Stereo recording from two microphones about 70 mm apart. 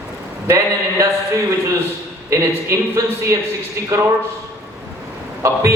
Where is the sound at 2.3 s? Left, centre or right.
Right.